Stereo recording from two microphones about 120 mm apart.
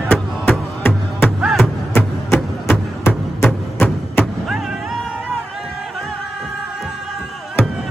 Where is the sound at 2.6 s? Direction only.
15° left (ahead or behind).